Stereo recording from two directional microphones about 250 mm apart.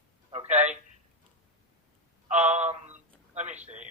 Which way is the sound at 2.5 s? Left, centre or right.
Right.